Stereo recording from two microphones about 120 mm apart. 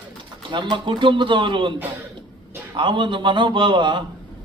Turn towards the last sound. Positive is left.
turn(degrees=-40)  # may be behind; listen again after turning